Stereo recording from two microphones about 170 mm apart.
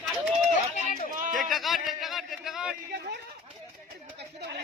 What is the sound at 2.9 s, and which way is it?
Speech, 80° right.